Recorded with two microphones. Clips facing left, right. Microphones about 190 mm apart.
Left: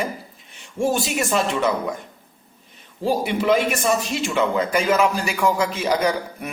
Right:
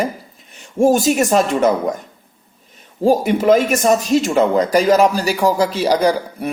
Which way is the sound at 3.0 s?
45° right (ahead or behind).